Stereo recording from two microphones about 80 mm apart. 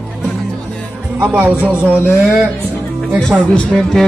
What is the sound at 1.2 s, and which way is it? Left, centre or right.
Speech, right.